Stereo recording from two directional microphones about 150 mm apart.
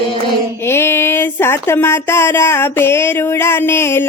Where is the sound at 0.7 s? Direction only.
15° left (ahead or behind).